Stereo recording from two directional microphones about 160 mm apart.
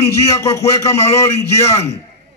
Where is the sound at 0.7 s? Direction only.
20° left (ahead or behind).